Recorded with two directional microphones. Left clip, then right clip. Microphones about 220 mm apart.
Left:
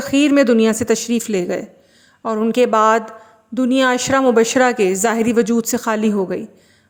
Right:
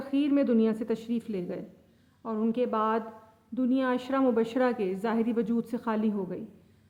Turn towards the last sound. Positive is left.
turn(degrees=35)  # may be behind; listen again after turning